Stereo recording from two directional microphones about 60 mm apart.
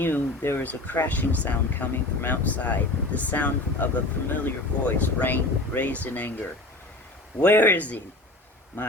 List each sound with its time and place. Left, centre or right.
0.0 s speech: left
7.4 s speech: left